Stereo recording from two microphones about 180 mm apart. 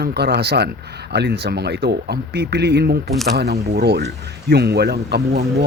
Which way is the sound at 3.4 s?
65° right (ahead or behind).